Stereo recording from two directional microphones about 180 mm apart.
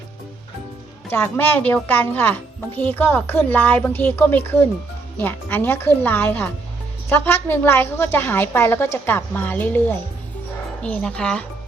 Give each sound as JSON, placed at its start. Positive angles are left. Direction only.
{"t": 1.1, "sound": "a child's voice", "side_deg": 10}
{"t": 10.8, "sound": "speech", "side_deg": 5}